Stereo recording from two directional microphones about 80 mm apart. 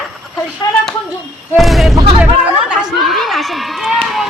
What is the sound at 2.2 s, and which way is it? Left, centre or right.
Chatter, centre.